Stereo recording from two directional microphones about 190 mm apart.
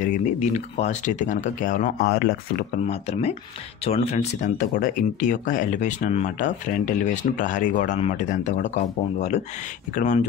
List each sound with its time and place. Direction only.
0.0 s speech: 40° left (ahead or behind)
2.9 s speech: 35° left (ahead or behind)
4.6 s speech: 45° left (ahead or behind)